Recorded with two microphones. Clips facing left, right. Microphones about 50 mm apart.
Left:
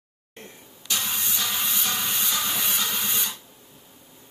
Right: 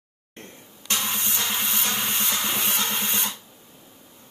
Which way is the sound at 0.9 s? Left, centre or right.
Right.